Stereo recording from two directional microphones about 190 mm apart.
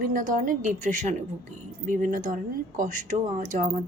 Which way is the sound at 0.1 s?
45° right (ahead or behind).